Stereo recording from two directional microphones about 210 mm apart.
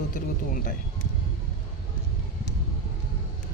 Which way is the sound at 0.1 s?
40° left (ahead or behind).